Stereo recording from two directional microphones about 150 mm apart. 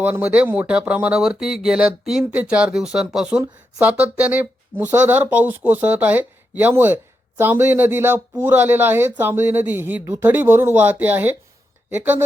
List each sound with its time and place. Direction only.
0.0 s speech: 10° right (ahead or behind)